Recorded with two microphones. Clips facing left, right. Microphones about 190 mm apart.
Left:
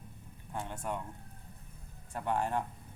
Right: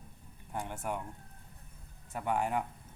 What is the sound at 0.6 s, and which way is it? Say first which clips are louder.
Speech: right 1 dB; 10° right (ahead or behind).